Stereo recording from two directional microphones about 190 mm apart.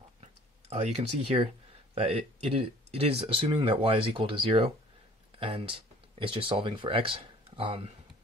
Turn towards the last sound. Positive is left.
turn(degrees=-30)  # may be behind; listen again after turning